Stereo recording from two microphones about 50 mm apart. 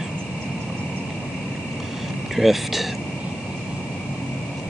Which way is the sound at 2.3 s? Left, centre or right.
Centre.